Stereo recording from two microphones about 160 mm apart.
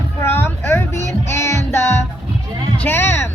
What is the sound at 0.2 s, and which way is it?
Music, 15° left (ahead or behind).